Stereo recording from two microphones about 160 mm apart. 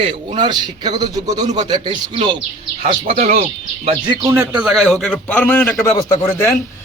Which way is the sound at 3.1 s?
40° right (ahead or behind).